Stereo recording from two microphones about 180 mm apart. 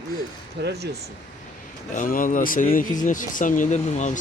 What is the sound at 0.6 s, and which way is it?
Speech, 70° right (ahead or behind).